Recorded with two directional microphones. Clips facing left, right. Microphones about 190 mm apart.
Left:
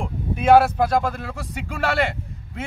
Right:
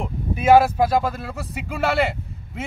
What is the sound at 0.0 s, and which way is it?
A man's voice, 5° right (ahead or behind).